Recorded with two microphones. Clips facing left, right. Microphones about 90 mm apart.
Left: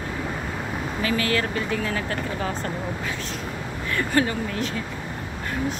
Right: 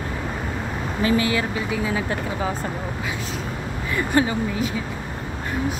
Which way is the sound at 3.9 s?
15° right (ahead or behind).